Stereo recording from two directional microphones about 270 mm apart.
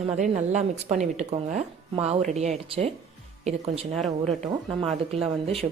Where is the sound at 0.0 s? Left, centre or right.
Right.